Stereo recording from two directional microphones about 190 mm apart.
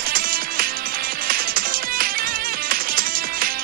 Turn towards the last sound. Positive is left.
turn(degrees=-50)  # may be behind; listen again after turning